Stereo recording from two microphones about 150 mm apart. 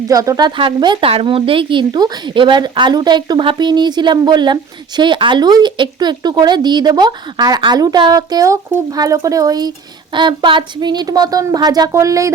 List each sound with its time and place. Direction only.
0.1 s a woman's voice: 25° right (ahead or behind)